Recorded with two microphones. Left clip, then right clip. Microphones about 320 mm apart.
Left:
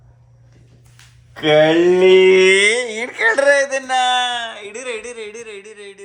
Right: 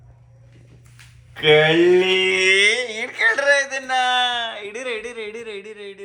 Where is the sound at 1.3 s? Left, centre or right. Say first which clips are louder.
Left 2 dB; left.